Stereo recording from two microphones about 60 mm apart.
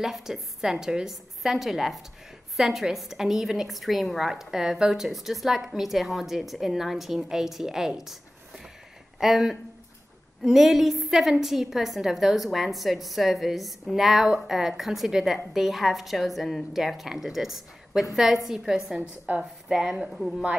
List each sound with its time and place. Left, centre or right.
0.0 s a woman's voice: centre
9.2 s a woman's voice: centre
18.9 s a woman's voice: right
19.7 s speech: centre
20.2 s a woman's voice: centre